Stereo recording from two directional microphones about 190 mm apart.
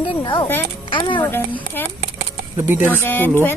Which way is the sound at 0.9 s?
25° left (ahead or behind).